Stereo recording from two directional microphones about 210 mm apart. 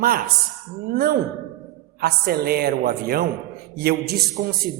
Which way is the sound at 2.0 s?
50° right (ahead or behind).